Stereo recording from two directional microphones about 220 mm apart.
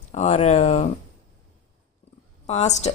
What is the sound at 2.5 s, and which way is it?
Speech, 30° left (ahead or behind).